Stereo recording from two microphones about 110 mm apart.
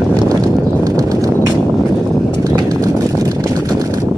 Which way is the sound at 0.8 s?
35° right (ahead or behind).